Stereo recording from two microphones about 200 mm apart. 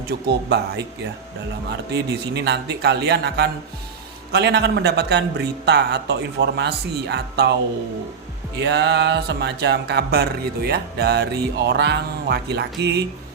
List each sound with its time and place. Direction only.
0.1 s speech: 55° right (ahead or behind)
1.9 s speech: 55° right (ahead or behind)
8.5 s speech: 60° right (ahead or behind)